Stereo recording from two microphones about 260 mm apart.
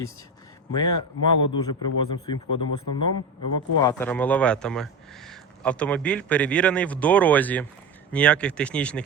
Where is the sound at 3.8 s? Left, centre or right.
Centre.